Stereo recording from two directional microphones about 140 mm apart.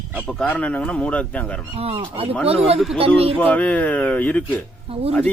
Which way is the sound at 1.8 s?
45° right (ahead or behind).